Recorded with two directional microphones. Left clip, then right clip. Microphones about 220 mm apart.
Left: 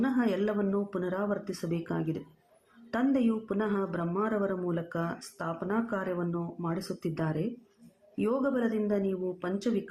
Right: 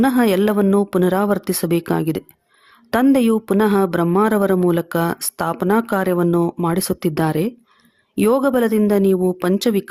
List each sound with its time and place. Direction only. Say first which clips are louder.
0.0 s a woman's voice: right 13 dB; 50° right (ahead or behind)